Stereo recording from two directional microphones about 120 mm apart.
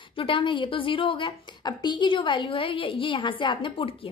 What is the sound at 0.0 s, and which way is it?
A woman's voice, 45° left (ahead or behind).